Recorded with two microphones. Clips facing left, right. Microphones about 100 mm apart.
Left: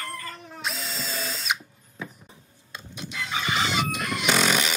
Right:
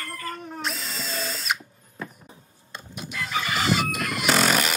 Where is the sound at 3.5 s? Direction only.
Centre (ahead or behind).